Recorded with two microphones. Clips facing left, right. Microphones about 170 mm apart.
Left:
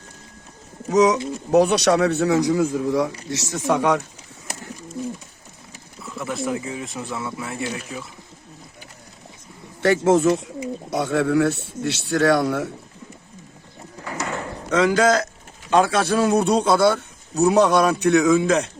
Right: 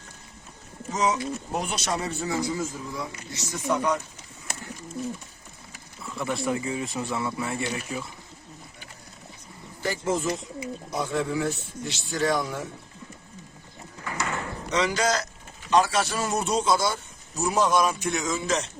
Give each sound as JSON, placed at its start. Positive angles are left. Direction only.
{"t": 0.9, "sound": "speech", "side_deg": 70}
{"t": 6.0, "sound": "speech", "side_deg": 0}
{"t": 9.8, "sound": "speech", "side_deg": 80}
{"t": 14.7, "sound": "a man's voice", "side_deg": 50}